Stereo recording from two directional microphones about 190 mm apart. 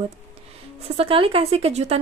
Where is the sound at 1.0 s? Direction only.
30° right (ahead or behind).